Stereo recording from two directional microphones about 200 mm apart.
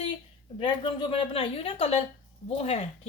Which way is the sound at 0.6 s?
25° left (ahead or behind).